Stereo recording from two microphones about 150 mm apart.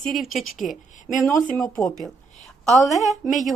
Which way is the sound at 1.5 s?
5° left (ahead or behind).